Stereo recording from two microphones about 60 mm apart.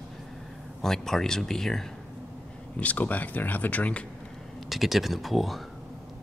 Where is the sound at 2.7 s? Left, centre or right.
Left.